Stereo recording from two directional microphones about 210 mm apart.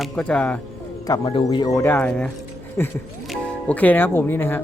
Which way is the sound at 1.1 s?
20° left (ahead or behind).